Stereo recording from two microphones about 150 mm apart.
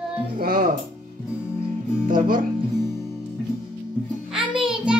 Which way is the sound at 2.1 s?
65° right (ahead or behind).